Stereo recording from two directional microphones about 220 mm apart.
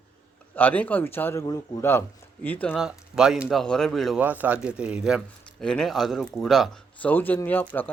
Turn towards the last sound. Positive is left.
turn(degrees=10)  # may be behind; listen again after turning